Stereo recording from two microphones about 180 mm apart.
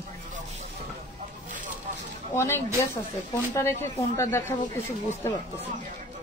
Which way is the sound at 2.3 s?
15° left (ahead or behind).